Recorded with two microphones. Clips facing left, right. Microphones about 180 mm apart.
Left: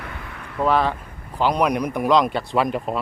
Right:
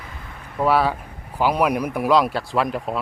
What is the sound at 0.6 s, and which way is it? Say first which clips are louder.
Speech: right 1 dB; 10° right (ahead or behind).